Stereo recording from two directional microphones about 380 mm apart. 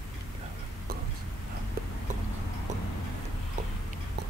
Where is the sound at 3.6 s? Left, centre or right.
Centre.